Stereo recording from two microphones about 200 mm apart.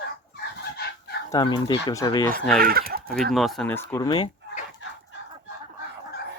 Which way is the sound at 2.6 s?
50° right (ahead or behind).